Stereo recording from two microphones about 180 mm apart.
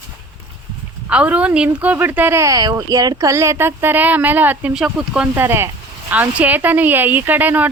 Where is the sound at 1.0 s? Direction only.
5° right (ahead or behind).